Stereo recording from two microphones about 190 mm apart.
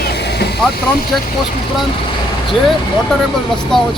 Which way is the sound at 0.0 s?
60° left (ahead or behind).